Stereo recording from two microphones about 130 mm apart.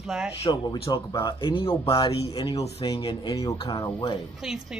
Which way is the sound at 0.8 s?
30° left (ahead or behind).